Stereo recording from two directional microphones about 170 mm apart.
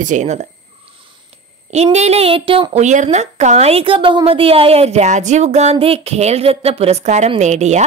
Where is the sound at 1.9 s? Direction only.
40° right (ahead or behind).